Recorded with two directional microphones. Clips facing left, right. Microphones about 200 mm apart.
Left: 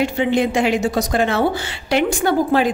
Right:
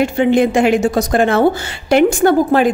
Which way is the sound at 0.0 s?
50° right (ahead or behind).